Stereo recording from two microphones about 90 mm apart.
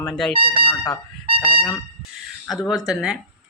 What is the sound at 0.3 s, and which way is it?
Speech, 90° right.